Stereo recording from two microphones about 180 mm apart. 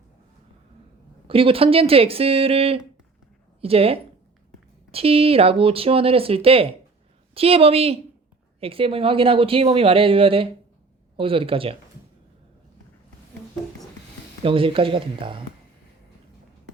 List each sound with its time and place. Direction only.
1.3 s speech: 30° right (ahead or behind)
14.4 s speech: 30° right (ahead or behind)